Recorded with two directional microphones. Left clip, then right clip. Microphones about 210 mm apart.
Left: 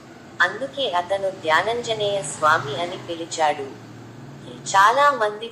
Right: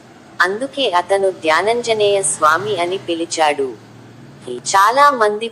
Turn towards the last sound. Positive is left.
turn(degrees=-35)  # may be behind; listen again after turning